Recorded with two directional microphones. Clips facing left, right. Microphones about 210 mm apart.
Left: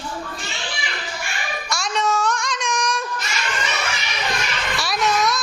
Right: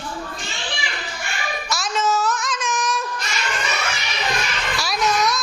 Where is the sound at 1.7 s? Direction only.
Centre (ahead or behind).